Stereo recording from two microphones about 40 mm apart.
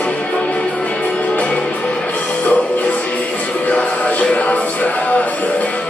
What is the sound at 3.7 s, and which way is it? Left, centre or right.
Music, left.